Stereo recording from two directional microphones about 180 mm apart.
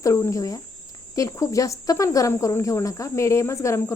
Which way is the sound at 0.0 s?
15° left (ahead or behind).